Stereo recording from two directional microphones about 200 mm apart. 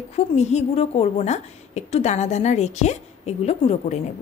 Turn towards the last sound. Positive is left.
turn(degrees=30)  # may be behind; listen again after turning